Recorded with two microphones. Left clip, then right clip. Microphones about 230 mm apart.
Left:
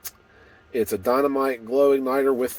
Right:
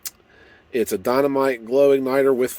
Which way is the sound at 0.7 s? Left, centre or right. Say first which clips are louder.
Right 1 dB; right.